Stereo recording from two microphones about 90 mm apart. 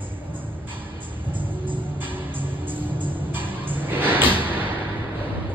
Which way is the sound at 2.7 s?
20° right (ahead or behind).